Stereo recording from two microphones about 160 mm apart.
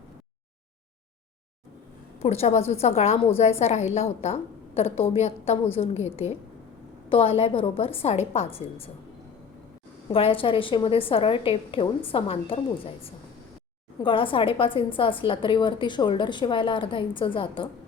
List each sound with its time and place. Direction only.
2.2 s a woman's voice: 40° left (ahead or behind)
7.1 s a woman's voice: 35° left (ahead or behind)
10.1 s a woman's voice: 35° left (ahead or behind)